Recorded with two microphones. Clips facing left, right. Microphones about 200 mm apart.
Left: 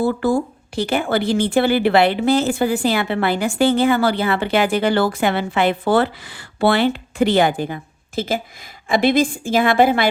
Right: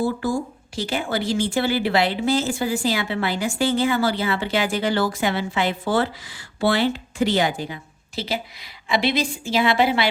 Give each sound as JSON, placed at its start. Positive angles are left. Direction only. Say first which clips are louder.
{"t": 0.0, "sound": "a woman's voice", "louder": "left 5 dB", "side_deg": 60}